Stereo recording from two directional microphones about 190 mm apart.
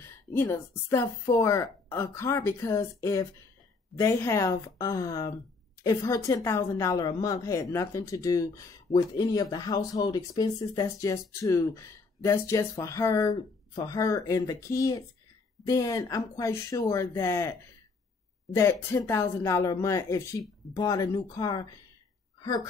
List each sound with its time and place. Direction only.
0.0 s a woman's voice: 15° left (ahead or behind)